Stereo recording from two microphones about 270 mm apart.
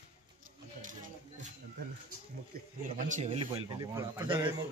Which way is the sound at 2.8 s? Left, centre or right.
Right.